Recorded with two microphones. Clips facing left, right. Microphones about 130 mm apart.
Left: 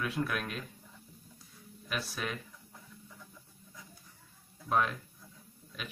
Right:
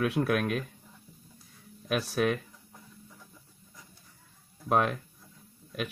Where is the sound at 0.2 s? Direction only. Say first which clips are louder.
Right 7 dB; 80° right.